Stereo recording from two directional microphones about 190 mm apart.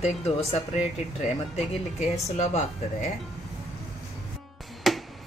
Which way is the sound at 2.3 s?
35° left (ahead or behind).